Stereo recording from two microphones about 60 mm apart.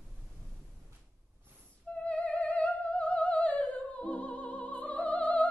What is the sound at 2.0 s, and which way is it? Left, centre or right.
Music, left.